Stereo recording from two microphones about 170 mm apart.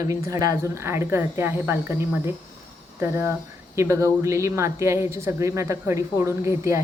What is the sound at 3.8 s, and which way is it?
Speech, 15° right (ahead or behind).